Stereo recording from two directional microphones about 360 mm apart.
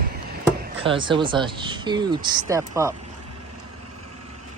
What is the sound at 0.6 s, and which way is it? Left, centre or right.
Speech, centre.